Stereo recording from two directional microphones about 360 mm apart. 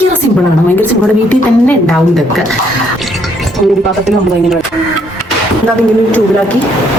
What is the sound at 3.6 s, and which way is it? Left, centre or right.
Speech, centre.